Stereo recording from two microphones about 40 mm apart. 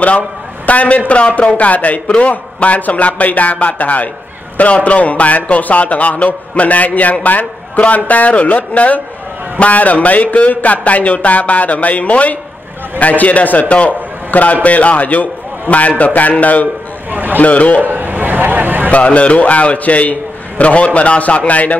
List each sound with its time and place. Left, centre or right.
0.7 s a man's voice: left
17.1 s a sound: right
17.4 s a man's voice: left
17.8 s vehicle: right
18.9 s a man's voice: left